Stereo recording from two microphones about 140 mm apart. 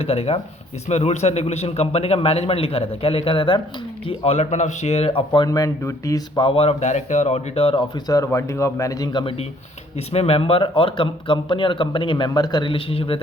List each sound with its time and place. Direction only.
0.0 s a man's voice: 45° left (ahead or behind)
5.5 s a man's voice: 25° left (ahead or behind); by 7.9 s 45° left (ahead or behind)
8.0 s speech: 25° left (ahead or behind)
10.1 s a man's voice: 45° left (ahead or behind)